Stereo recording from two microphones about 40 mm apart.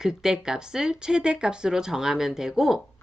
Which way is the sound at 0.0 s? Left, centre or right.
Centre.